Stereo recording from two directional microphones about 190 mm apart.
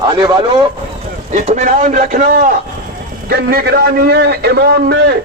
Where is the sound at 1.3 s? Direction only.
35° right (ahead or behind).